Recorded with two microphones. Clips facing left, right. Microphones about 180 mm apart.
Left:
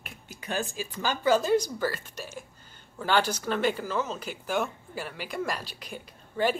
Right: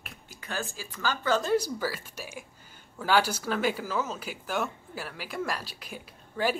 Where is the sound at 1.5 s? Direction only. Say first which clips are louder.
Left 2 dB; 5° right (ahead or behind).